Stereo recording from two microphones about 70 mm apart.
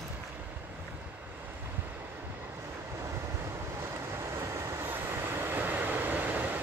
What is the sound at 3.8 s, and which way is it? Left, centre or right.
Vehicle, right.